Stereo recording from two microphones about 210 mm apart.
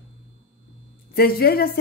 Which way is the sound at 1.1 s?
45° left (ahead or behind).